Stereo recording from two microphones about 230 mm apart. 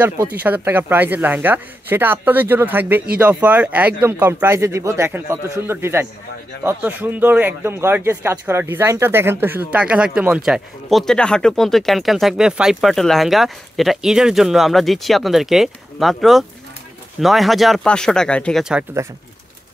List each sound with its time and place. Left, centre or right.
0.0 s speech: centre